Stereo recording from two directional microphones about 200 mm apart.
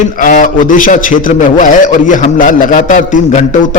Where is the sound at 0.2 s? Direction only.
40° left (ahead or behind).